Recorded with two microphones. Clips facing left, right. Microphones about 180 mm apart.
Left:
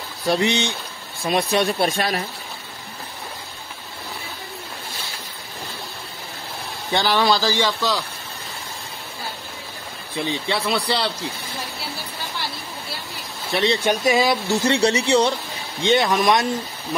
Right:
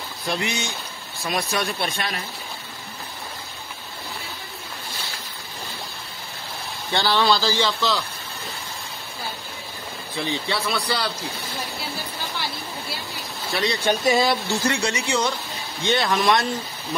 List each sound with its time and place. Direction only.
0.3 s speech: 30° left (ahead or behind)
6.9 s a man's voice: 15° left (ahead or behind)
10.1 s speech: 20° left (ahead or behind)
13.5 s speech: 25° left (ahead or behind)
13.8 s a man's voice: 10° left (ahead or behind)
14.7 s speech: 35° left (ahead or behind)
15.8 s a man's voice: 20° left (ahead or behind)